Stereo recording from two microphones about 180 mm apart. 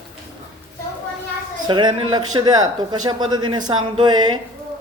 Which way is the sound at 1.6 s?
25° right (ahead or behind).